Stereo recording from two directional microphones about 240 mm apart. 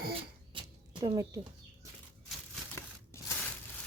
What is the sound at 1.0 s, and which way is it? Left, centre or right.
Speech, centre.